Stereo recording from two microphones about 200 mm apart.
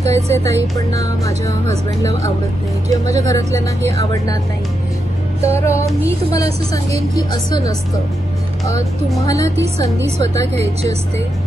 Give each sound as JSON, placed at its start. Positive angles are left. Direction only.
{"t": 0.1, "sound": "a woman's voice", "side_deg": 15}
{"t": 3.3, "sound": "a woman's voice", "side_deg": 15}
{"t": 5.4, "sound": "a woman's voice", "side_deg": 15}
{"t": 9.2, "sound": "a woman's voice", "side_deg": 15}
{"t": 10.5, "sound": "speech", "side_deg": -30}